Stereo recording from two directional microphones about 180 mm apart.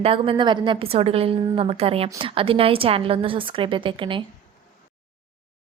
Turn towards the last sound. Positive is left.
turn(degrees=-30)  # may be behind; listen again after turning